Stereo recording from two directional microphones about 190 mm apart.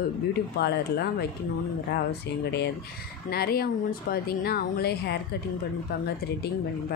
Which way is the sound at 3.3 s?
55° left (ahead or behind).